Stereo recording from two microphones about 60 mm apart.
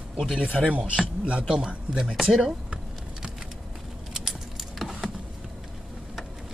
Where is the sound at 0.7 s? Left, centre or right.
Centre.